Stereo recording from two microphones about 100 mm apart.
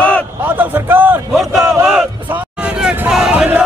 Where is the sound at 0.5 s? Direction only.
20° right (ahead or behind).